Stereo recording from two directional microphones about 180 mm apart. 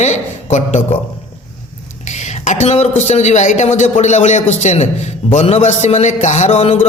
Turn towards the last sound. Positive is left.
turn(degrees=35)  # may be behind; listen again after turning